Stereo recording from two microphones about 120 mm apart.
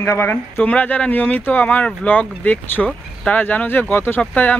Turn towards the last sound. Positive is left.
turn(degrees=10)  # may be behind; listen again after turning